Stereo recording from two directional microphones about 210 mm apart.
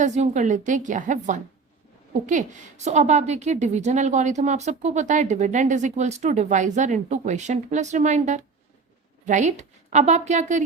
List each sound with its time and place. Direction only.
0.0 s a woman's voice: 35° right (ahead or behind)